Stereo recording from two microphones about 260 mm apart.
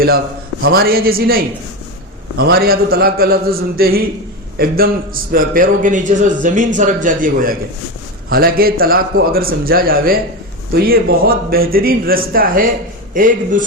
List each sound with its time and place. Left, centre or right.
0.6 s a man's voice: right
2.4 s a man's voice: right